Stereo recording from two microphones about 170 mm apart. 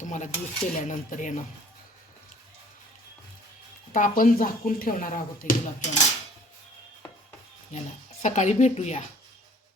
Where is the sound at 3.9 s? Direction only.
50° left (ahead or behind).